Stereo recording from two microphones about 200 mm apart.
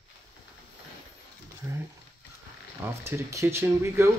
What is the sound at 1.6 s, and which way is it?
Patter, 15° right (ahead or behind).